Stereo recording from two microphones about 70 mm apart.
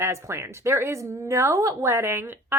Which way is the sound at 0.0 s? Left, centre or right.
Right.